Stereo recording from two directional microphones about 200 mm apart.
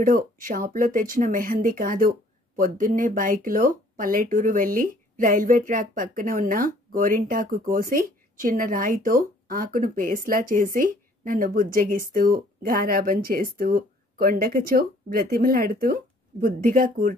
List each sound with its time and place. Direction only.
0.0 s speech: 45° right (ahead or behind)